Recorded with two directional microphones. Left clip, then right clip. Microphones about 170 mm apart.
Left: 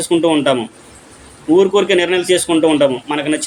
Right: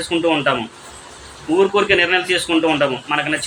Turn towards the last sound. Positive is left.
turn(degrees=50)  # may be behind; listen again after turning